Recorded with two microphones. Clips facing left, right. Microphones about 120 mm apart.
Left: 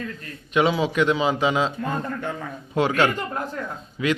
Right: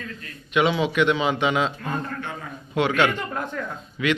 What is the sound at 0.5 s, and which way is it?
A man's voice, 35° left (ahead or behind).